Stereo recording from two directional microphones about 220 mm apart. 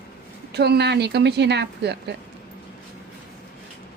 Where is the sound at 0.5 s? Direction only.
50° right (ahead or behind).